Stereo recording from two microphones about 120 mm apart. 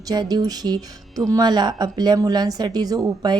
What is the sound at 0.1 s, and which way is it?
Speech, 35° right (ahead or behind).